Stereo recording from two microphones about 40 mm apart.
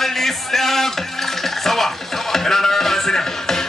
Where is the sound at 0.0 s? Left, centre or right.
Centre.